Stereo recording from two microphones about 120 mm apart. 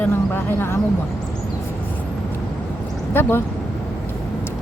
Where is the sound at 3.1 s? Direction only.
15° left (ahead or behind).